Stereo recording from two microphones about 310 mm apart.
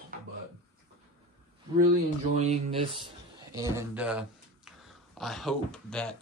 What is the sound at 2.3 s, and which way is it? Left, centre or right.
Speech, right.